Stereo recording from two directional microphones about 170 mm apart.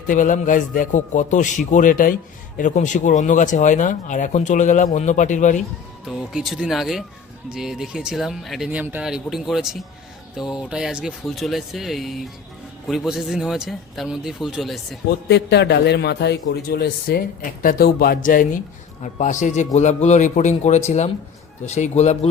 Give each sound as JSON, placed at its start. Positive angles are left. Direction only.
{"t": 0.1, "sound": "speech", "side_deg": 50}
{"t": 6.1, "sound": "speech", "side_deg": 0}
{"t": 15.3, "sound": "a man's voice", "side_deg": 80}